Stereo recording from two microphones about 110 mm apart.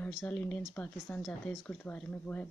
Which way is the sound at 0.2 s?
15° left (ahead or behind).